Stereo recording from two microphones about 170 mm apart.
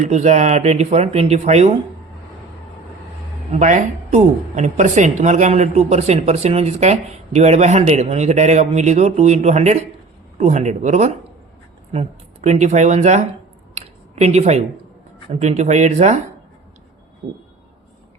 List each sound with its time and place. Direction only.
0.0 s speech: 40° right (ahead or behind)
3.5 s speech: 45° right (ahead or behind)
13.7 s a sound: 40° right (ahead or behind)
15.3 s speech: 40° right (ahead or behind)